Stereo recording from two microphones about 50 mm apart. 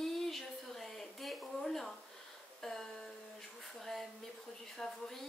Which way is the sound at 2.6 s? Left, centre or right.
Centre.